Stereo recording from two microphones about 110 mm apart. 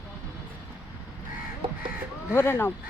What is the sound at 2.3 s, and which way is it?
Speech, 20° left (ahead or behind).